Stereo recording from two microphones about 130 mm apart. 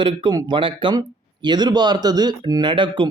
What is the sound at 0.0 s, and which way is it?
Speech, 35° right (ahead or behind).